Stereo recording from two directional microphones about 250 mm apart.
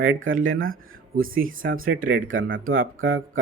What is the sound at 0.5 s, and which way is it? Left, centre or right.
Speech, right.